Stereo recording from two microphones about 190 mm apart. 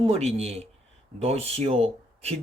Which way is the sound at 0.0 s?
35° right (ahead or behind).